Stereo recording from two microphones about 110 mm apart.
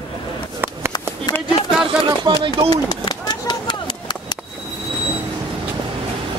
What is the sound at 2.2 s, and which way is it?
Speech, 40° right (ahead or behind).